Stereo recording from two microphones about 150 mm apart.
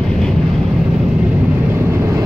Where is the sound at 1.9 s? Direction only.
20° right (ahead or behind).